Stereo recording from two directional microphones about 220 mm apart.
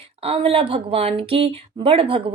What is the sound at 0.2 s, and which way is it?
Speech, 25° right (ahead or behind).